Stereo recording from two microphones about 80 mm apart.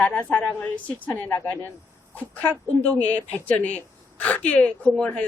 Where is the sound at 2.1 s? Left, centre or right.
Centre.